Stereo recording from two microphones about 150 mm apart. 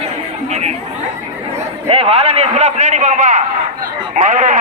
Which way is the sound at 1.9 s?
40° right (ahead or behind).